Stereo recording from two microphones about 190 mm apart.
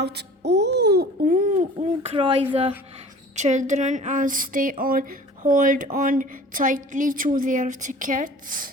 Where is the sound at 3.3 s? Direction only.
40° right (ahead or behind).